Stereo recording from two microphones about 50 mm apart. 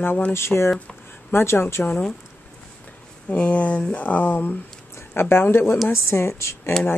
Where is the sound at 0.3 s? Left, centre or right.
Left.